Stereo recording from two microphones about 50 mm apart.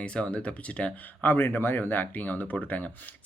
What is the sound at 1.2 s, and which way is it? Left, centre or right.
Speech, left.